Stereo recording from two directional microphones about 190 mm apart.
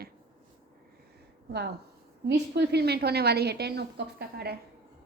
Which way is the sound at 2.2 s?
60° right (ahead or behind).